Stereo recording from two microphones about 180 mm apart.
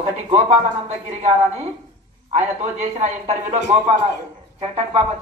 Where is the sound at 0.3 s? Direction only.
35° right (ahead or behind).